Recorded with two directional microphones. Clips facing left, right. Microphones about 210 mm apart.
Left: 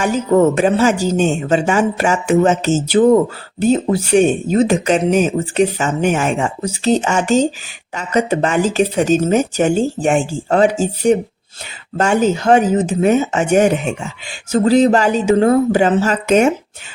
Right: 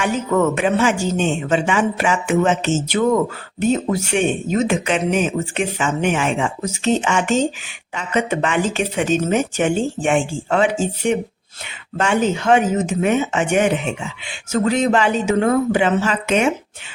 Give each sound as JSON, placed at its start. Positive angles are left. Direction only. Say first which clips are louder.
{"t": 0.0, "sound": "speech", "louder": "left 5 dB", "side_deg": 35}